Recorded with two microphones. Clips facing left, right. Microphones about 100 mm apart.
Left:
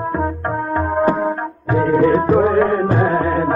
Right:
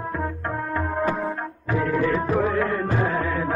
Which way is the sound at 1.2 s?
35° left (ahead or behind).